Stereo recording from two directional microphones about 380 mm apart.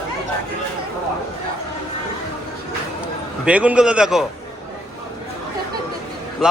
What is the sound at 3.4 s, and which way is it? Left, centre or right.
Speech, centre.